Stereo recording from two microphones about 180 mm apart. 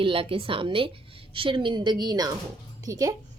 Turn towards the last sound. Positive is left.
turn(degrees=-20)  # may be behind; listen again after turning